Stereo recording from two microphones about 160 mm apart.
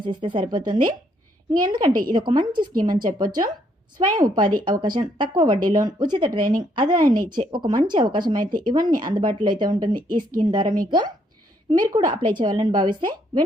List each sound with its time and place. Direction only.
0.0 s a woman's voice: 30° right (ahead or behind)